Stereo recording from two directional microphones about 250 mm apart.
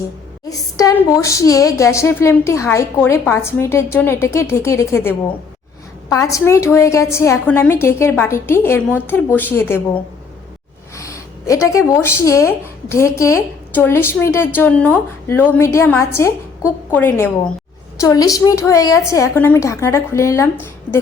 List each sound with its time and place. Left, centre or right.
0.8 s speech: centre